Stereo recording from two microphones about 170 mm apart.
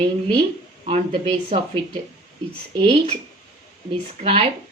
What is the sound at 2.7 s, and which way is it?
Speech, 35° right (ahead or behind).